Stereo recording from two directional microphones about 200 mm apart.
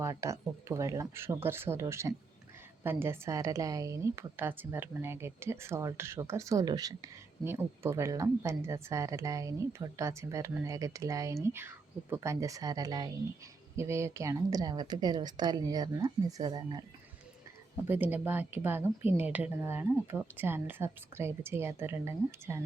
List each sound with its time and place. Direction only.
0.0 s a woman's voice: 15° right (ahead or behind)
17.8 s a woman's voice: 10° right (ahead or behind)